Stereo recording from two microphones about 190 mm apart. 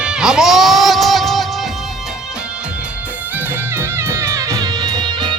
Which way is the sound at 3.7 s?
15° right (ahead or behind).